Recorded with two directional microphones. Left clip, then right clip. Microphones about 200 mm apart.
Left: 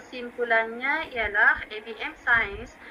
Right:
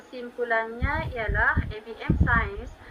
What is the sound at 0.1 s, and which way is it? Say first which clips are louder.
A woman's voice: left 2 dB; 35° left (ahead or behind).